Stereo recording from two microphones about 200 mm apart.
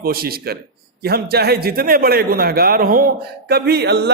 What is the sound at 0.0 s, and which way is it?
A man's voice, 50° right (ahead or behind).